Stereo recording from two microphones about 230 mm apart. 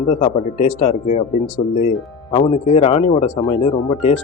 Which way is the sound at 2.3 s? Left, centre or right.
Left.